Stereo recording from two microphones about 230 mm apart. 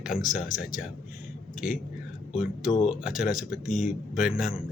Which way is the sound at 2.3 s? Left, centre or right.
Centre.